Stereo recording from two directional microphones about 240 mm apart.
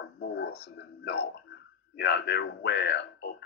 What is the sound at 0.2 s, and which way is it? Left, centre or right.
Speech, left.